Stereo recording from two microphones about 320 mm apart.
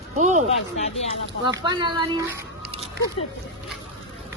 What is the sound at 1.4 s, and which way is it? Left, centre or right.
Speech, centre.